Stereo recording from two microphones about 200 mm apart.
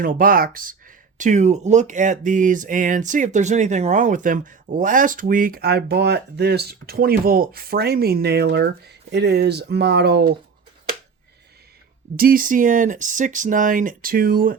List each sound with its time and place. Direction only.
0.0 s speech: 45° right (ahead or behind)
12.1 s speech: 45° right (ahead or behind)